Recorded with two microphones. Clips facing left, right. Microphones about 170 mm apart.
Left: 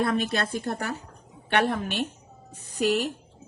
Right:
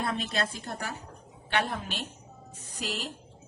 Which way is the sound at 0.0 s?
65° left (ahead or behind).